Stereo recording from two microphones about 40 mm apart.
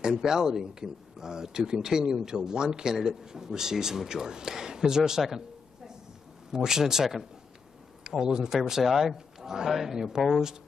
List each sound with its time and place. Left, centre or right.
0.1 s speech: centre
6.5 s speech: centre